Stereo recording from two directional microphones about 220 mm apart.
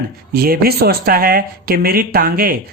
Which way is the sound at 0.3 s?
45° right (ahead or behind).